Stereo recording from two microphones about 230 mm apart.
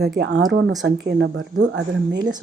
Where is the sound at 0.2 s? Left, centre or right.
Right.